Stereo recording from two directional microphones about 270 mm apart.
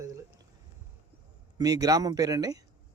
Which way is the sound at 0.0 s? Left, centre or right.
Centre.